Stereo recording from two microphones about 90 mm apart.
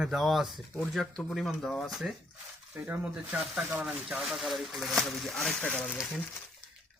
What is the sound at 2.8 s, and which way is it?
Speech, 25° right (ahead or behind).